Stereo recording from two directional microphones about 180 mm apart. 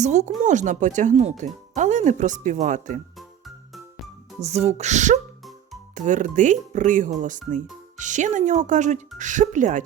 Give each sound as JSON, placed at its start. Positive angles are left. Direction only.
{"t": 0.0, "sound": "speech", "side_deg": -40}
{"t": 4.4, "sound": "speech", "side_deg": -35}